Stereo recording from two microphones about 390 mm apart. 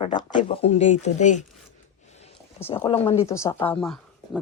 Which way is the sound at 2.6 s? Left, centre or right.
Centre.